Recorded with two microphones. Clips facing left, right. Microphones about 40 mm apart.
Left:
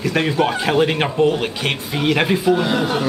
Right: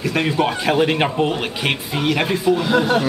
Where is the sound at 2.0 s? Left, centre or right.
Centre.